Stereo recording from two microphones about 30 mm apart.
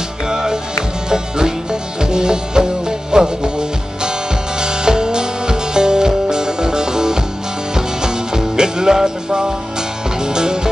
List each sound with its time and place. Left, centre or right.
0.3 s music: right